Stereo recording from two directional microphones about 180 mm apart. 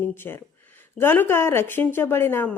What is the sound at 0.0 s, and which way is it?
Speech, 10° left (ahead or behind).